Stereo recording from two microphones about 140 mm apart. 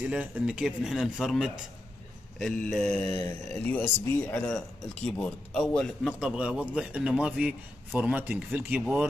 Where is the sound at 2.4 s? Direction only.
5° left (ahead or behind).